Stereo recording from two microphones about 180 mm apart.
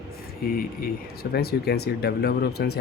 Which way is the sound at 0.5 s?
55° left (ahead or behind).